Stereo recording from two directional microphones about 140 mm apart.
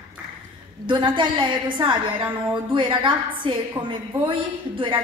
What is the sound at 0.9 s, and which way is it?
A woman's voice, 35° right (ahead or behind).